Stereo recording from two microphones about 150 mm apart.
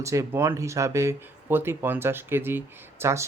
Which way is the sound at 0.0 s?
20° right (ahead or behind).